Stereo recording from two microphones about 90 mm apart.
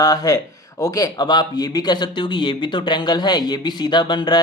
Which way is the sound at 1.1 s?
50° left (ahead or behind).